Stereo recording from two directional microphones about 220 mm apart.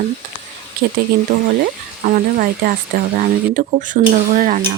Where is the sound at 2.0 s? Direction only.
40° right (ahead or behind).